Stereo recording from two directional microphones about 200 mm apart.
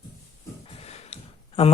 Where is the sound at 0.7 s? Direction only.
30° left (ahead or behind).